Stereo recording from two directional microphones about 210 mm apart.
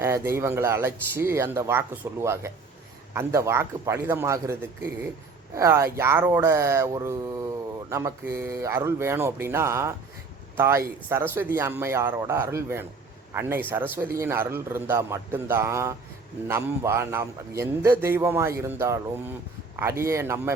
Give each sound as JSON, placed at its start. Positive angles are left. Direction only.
{"t": 0.0, "sound": "a man's voice", "side_deg": -10}